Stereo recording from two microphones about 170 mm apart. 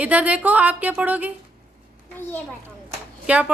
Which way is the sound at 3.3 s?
5° right (ahead or behind).